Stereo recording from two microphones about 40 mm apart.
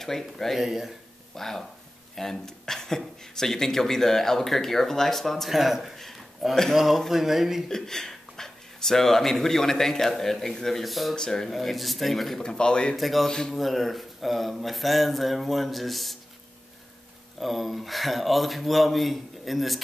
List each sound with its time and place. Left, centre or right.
0.0 s speech: centre
0.6 s speech: centre
1.3 s speech: centre
5.9 s a sound: centre
6.7 s speech: centre
7.6 s speech: centre
11.1 s speech: centre
11.5 s speech: centre
12.4 s a man's voice: left
12.9 s speech: centre
13.3 s speech: centre
13.6 s speech: centre
17.4 s speech: centre